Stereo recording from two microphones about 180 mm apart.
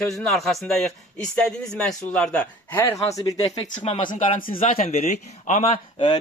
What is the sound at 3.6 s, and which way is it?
Speech, 30° left (ahead or behind).